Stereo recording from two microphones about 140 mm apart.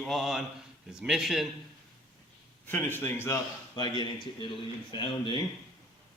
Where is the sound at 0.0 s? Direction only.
Centre (ahead or behind).